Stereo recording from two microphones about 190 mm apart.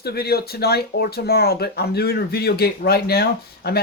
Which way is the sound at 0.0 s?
55° left (ahead or behind).